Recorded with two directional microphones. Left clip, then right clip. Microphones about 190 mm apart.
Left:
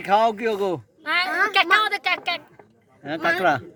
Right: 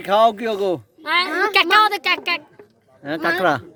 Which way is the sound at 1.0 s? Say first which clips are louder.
Right 3 dB; 50° right (ahead or behind).